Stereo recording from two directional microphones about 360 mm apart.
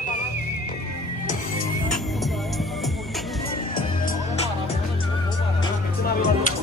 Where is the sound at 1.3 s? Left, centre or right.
Left.